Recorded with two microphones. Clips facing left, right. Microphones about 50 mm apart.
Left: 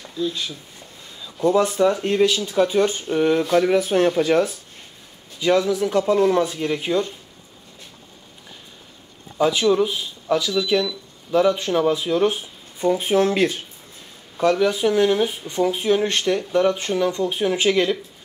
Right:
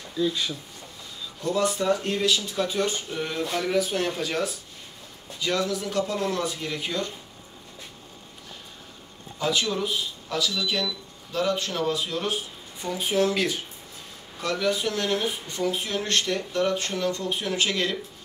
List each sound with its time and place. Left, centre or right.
1.4 s speech: left
5.4 s speech: left
9.4 s speech: left
12.8 s speech: left
14.4 s speech: left